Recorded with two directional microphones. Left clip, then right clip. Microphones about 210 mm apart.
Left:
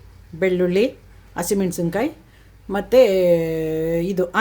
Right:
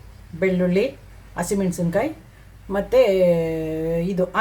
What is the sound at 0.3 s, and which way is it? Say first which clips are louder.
Speech: left 2 dB; 45° left (ahead or behind).